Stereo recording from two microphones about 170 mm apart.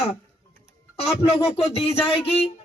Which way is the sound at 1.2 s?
35° left (ahead or behind).